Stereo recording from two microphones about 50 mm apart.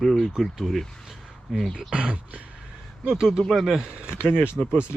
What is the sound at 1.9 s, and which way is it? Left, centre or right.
Speech, right.